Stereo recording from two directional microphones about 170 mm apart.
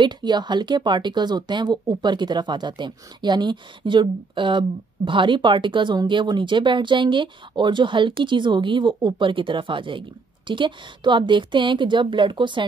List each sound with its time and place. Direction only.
0.0 s speech: 25° right (ahead or behind)